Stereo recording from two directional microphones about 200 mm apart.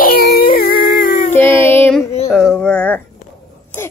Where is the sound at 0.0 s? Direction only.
45° left (ahead or behind).